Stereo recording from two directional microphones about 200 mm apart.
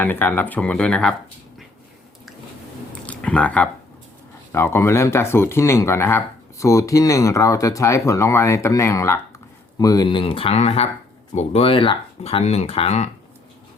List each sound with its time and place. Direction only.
0.0 s speech: 10° left (ahead or behind)
3.1 s a sound: 5° left (ahead or behind)
4.5 s speech: 10° left (ahead or behind); by 13.1 s 30° left (ahead or behind)